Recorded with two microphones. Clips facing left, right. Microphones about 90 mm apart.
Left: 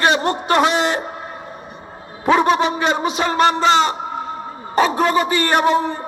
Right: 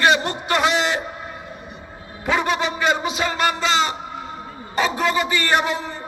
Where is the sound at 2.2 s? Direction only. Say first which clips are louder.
Left 6 dB; 40° left (ahead or behind).